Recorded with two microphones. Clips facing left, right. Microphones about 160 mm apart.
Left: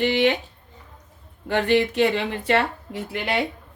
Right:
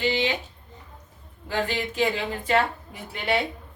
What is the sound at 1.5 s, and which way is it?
A woman's voice, 65° left (ahead or behind).